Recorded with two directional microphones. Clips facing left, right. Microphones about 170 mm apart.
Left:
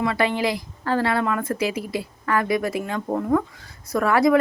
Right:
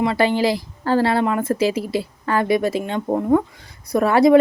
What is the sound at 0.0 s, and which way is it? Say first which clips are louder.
Speech: right 4 dB; 30° right (ahead or behind).